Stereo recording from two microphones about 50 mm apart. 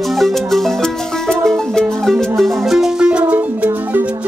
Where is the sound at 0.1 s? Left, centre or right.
Centre.